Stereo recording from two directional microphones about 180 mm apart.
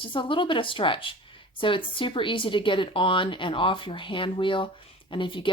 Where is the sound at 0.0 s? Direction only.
25° left (ahead or behind).